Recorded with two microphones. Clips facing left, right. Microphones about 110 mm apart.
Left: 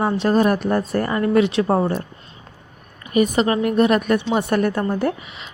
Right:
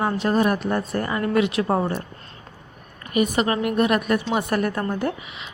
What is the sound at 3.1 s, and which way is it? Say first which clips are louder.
A woman's voice: left 3 dB; 30° left (ahead or behind).